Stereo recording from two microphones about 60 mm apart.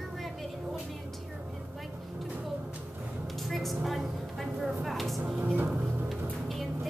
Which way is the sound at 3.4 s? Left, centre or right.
Centre.